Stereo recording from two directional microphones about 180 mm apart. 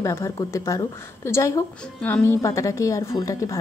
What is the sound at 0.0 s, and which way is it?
A woman's voice, 15° left (ahead or behind).